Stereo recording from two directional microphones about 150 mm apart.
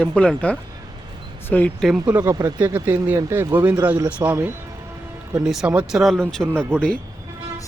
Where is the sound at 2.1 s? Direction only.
15° right (ahead or behind).